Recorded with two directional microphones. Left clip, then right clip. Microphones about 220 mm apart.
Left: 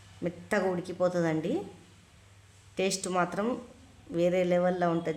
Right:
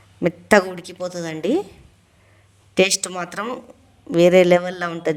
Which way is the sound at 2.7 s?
45° right (ahead or behind).